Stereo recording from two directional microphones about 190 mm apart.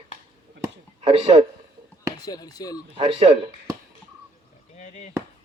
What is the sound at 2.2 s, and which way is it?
Speech, 20° left (ahead or behind).